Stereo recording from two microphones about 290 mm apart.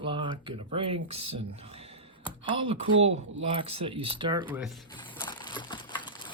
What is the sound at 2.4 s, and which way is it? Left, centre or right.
Speech, centre.